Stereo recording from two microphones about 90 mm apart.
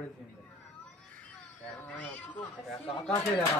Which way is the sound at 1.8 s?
15° left (ahead or behind).